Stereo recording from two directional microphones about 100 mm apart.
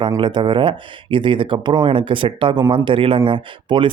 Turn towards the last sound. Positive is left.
turn(degrees=-55)  # may be behind; listen again after turning